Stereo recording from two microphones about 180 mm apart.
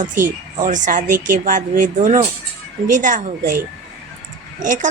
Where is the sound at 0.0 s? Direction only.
45° right (ahead or behind).